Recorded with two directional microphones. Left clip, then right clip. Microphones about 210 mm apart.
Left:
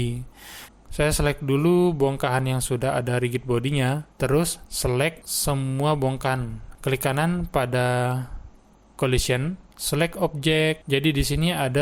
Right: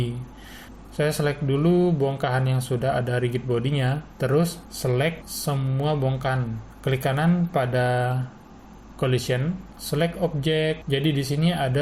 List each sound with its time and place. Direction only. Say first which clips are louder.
0.5 s speech: left 1 dB; 40° left (ahead or behind)